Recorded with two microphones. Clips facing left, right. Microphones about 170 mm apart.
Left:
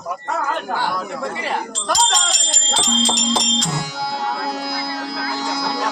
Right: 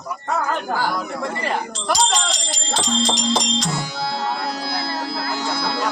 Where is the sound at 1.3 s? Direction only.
5° left (ahead or behind).